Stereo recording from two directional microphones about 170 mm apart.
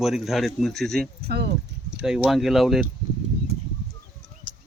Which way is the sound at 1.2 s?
70° right (ahead or behind).